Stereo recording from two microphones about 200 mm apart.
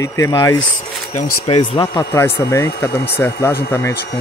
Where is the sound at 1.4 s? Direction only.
30° left (ahead or behind); by 3.5 s 15° left (ahead or behind).